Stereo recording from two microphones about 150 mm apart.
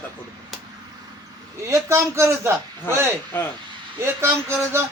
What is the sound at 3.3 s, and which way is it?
Speech, 15° left (ahead or behind).